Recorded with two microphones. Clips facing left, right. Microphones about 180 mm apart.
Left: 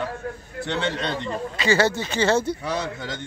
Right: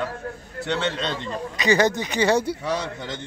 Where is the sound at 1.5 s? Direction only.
20° right (ahead or behind).